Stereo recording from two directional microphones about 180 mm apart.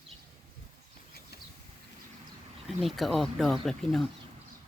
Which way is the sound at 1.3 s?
60° left (ahead or behind).